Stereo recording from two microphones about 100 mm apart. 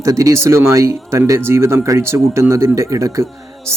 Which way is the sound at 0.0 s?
35° right (ahead or behind).